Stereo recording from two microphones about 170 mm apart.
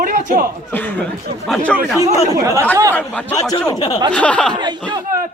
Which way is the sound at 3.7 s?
20° left (ahead or behind).